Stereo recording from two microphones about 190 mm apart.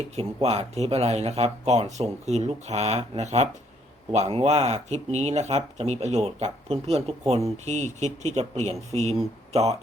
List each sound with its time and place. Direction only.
0.4 s speech: 35° right (ahead or behind)